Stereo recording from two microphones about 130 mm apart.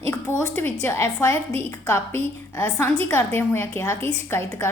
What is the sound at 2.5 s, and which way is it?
A woman's voice, 15° left (ahead or behind).